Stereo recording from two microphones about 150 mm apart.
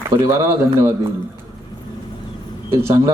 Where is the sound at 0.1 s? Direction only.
20° right (ahead or behind).